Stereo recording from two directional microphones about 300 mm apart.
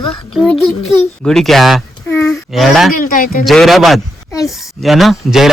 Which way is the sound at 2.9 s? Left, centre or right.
Left.